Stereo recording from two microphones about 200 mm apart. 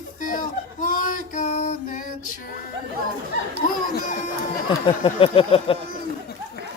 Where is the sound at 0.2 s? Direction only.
40° left (ahead or behind).